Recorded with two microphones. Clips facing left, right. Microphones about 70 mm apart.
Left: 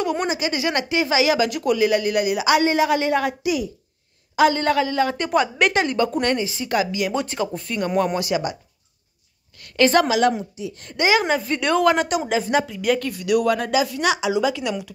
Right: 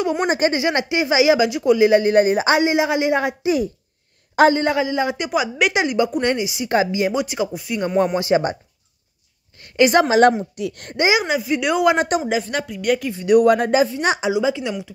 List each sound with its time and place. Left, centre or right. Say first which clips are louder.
0.0 s a man's voice: right 4 dB; centre; by 2.6 s right
2.6 s a man's voice: right 1 dB; centre
3.4 s speech: right 4 dB; right
4.5 s a woman's voice: right 2 dB; right
6.7 s a woman's voice: right 4 dB; right
8.2 s speech: right 5 dB; right
9.6 s a woman's voice: right 2 dB; right
10.0 s speech: right 5 dB; right
10.5 s speech: right 5 dB; right
11.0 s a man's voice: right 1 dB; centre
11.2 s a woman's voice: right 1 dB; centre
13.1 s speech: right 6 dB; right
14.3 s a man's voice: right 1 dB; right